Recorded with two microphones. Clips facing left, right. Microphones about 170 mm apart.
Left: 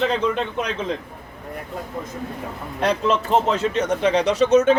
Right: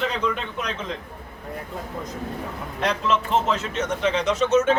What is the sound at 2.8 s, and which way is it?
A man's voice, 35° left (ahead or behind).